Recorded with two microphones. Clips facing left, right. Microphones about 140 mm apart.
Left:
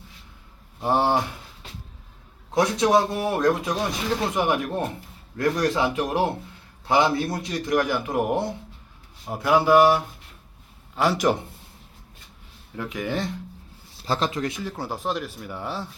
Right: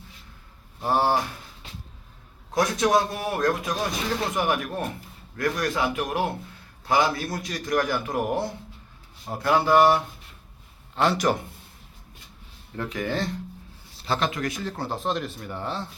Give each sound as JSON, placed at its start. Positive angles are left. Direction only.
{"t": 0.8, "sound": "a man's voice", "side_deg": 20}
{"t": 2.6, "sound": "a man's voice", "side_deg": 25}
{"t": 11.2, "sound": "a man's voice", "side_deg": 20}
{"t": 12.7, "sound": "speech", "side_deg": 10}
{"t": 14.1, "sound": "speech", "side_deg": 30}
{"t": 14.8, "sound": "speech", "side_deg": 10}